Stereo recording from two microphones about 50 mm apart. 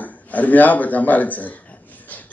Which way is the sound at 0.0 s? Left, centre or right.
Left.